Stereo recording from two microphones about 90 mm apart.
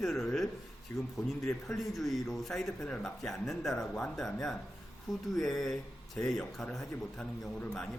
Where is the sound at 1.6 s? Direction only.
Centre (ahead or behind).